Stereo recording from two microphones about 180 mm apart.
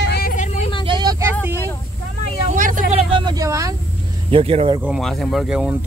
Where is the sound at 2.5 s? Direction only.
45° right (ahead or behind).